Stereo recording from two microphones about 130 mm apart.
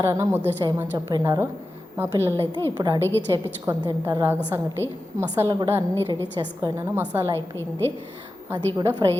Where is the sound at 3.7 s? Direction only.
20° right (ahead or behind).